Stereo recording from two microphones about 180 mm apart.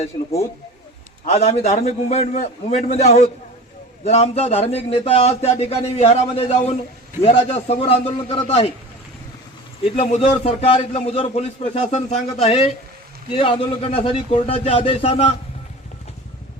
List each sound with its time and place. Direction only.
1.2 s a man's voice: 40° left (ahead or behind)
9.8 s a man's voice: 35° left (ahead or behind)